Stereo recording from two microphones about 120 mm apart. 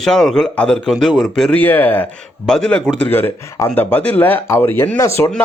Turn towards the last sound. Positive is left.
turn(degrees=25)  # may be behind; listen again after turning